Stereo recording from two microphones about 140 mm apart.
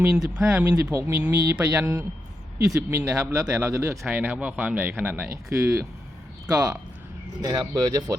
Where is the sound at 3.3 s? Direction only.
20° right (ahead or behind).